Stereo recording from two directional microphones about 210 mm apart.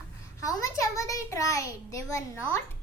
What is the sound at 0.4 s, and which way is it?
A child's voice, 15° left (ahead or behind).